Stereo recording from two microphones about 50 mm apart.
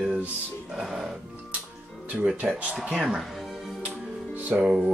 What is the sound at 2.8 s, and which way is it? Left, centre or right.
Speech, centre.